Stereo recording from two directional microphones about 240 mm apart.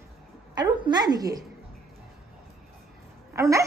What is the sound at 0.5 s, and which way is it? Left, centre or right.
Speech, centre.